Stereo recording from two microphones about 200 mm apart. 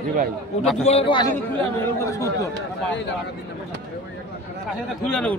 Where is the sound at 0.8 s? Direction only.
30° left (ahead or behind); by 2.5 s 15° left (ahead or behind).